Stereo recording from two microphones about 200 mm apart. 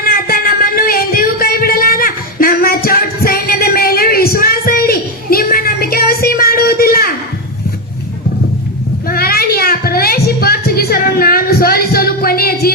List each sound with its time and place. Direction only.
0.0 s music: 45° left (ahead or behind)
9.0 s music: 50° left (ahead or behind)